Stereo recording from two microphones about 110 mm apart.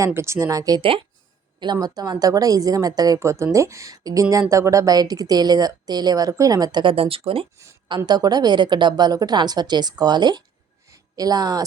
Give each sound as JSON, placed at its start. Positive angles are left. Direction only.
{"t": 0.0, "sound": "speech", "side_deg": -25}
{"t": 0.8, "sound": "speech", "side_deg": -55}
{"t": 1.5, "sound": "a woman's voice", "side_deg": -40}
{"t": 6.9, "sound": "speech", "side_deg": -60}
{"t": 7.9, "sound": "a woman's voice", "side_deg": -40}